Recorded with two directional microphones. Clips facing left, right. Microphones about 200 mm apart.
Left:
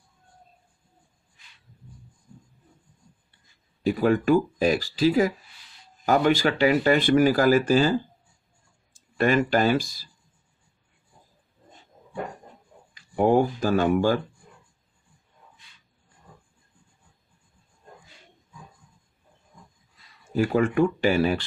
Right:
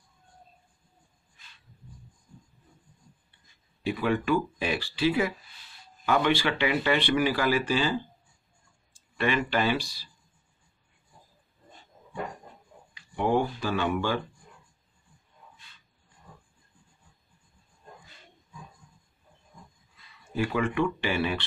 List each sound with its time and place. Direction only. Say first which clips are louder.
3.8 s speech: left 6 dB; 40° left (ahead or behind)
9.2 s speech: left 6 dB; 45° left (ahead or behind)
13.1 s speech: left 6 dB; 40° left (ahead or behind)
20.3 s speech: left 6 dB; 40° left (ahead or behind)